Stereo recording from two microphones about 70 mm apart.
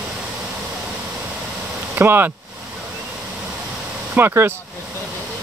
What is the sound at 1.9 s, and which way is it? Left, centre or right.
Speech, right.